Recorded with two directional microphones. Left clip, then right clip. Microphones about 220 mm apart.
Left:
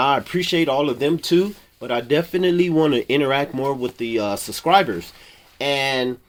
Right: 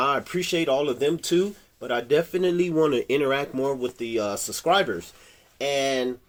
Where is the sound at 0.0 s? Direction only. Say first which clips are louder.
Left 5 dB; 25° left (ahead or behind).